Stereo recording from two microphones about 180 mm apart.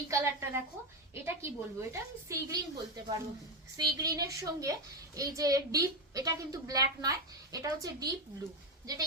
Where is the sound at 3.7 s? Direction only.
20° right (ahead or behind).